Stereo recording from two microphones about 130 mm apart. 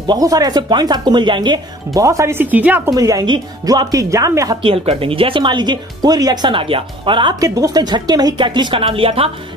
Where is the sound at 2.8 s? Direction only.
25° right (ahead or behind).